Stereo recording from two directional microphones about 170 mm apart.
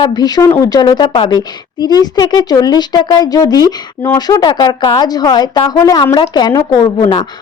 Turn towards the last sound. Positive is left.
turn(degrees=30)  # may be behind; listen again after turning